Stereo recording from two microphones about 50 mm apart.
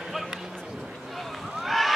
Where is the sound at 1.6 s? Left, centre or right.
Centre.